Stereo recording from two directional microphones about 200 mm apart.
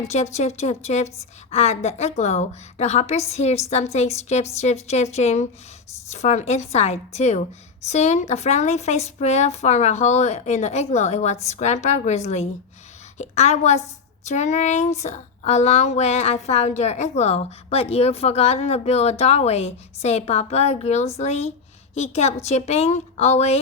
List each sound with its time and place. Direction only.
0.1 s speech: 35° left (ahead or behind)